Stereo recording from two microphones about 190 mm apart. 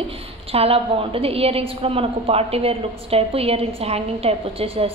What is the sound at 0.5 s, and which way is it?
A woman's voice, 30° right (ahead or behind).